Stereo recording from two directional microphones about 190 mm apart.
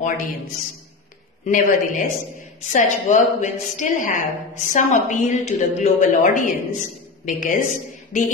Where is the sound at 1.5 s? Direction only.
45° left (ahead or behind).